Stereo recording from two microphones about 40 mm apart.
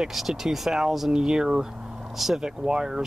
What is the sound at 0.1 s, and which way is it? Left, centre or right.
Speech, centre.